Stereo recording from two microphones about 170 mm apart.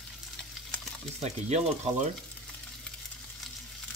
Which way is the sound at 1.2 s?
40° right (ahead or behind).